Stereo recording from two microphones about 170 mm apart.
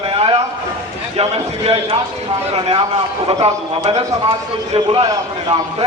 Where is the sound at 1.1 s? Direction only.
35° right (ahead or behind).